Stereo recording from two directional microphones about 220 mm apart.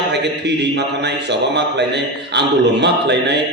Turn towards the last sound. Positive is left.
turn(degrees=-50)  # may be behind; listen again after turning